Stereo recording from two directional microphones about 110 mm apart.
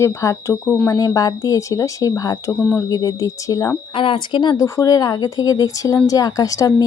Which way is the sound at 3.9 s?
50° left (ahead or behind).